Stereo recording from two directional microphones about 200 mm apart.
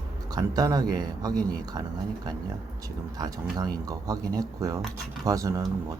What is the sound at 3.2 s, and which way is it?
Speech, 20° right (ahead or behind).